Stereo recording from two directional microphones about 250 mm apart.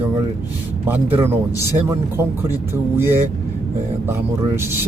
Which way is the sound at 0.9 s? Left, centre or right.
Centre.